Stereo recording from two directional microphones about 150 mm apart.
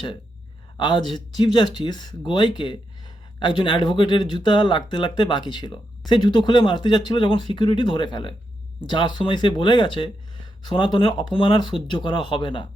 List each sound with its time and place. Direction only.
0.8 s speech: 30° left (ahead or behind)